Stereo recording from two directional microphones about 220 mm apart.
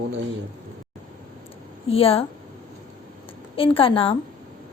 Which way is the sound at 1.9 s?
25° left (ahead or behind).